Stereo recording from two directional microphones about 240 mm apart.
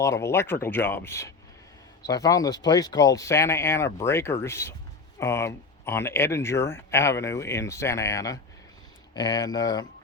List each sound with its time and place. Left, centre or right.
0.0 s speech: centre